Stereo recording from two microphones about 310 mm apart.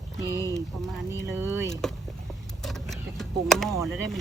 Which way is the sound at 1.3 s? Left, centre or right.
Centre.